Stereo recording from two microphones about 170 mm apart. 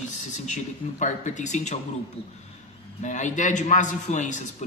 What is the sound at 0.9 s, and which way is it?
Speech, 45° left (ahead or behind).